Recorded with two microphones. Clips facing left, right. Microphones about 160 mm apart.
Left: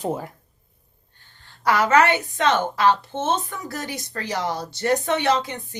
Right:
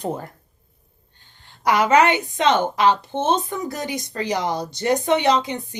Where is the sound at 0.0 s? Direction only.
5° left (ahead or behind).